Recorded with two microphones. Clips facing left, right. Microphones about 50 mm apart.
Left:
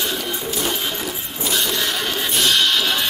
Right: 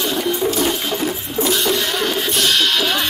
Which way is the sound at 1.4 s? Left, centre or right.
Centre.